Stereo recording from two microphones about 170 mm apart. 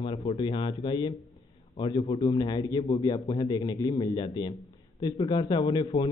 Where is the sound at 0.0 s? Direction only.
30° left (ahead or behind).